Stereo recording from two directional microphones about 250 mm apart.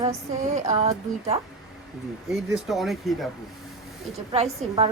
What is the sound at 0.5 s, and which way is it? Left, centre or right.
Speech, right.